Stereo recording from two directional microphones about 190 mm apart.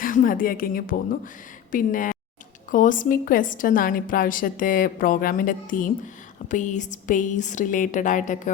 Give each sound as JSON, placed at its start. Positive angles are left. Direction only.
{"t": 0.0, "sound": "a woman's voice", "side_deg": 45}